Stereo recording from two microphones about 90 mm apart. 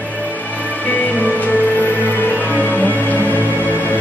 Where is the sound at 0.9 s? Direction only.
15° left (ahead or behind).